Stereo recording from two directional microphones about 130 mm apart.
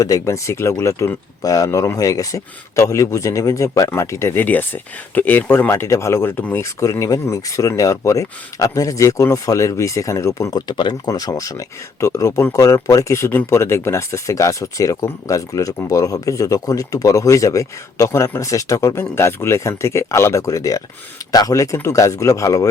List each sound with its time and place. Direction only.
0.0 s speech: 25° left (ahead or behind)